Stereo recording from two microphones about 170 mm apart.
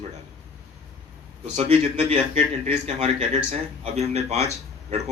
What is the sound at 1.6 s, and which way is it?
A man's voice, 35° right (ahead or behind).